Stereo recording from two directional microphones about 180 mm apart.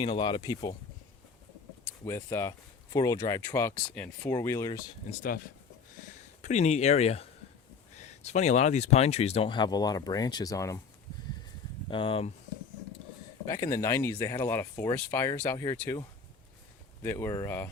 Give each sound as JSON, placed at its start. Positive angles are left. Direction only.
{"t": 0.0, "sound": "speech", "side_deg": 25}
{"t": 1.8, "sound": "speech", "side_deg": 15}
{"t": 5.1, "sound": "speech", "side_deg": 40}
{"t": 6.4, "sound": "speech", "side_deg": 40}
{"t": 11.9, "sound": "speech", "side_deg": 30}
{"t": 13.5, "sound": "speech", "side_deg": 15}